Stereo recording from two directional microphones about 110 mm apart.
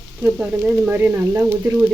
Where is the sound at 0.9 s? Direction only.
15° right (ahead or behind).